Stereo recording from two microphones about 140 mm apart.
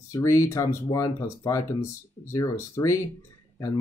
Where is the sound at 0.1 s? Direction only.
20° left (ahead or behind).